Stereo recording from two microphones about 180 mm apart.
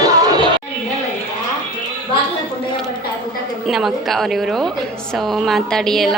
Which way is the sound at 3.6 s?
Centre (ahead or behind).